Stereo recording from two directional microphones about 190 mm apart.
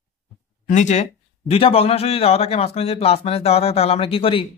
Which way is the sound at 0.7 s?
40° left (ahead or behind).